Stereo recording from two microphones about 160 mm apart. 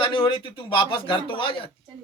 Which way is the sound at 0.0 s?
30° left (ahead or behind).